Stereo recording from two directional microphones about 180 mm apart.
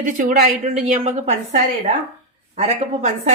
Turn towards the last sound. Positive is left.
turn(degrees=-35)  # may be behind; listen again after turning